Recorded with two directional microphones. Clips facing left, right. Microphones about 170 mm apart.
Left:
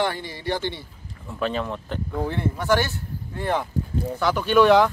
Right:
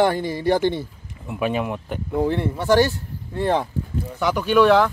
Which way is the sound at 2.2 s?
30° right (ahead or behind).